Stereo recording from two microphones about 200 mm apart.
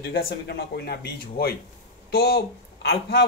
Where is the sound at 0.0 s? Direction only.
50° left (ahead or behind).